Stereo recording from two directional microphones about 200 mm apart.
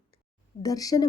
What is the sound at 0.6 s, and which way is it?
Speech, 20° left (ahead or behind).